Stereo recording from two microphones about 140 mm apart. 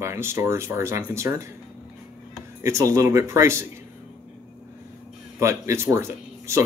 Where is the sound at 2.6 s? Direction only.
20° right (ahead or behind).